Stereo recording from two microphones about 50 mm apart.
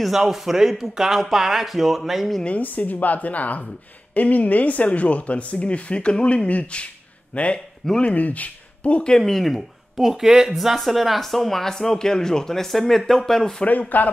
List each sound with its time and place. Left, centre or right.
0.0 s speech: centre
2.4 s a woman's voice: left
9.1 s speech: centre
9.9 s speech: centre
13.7 s a woman's voice: left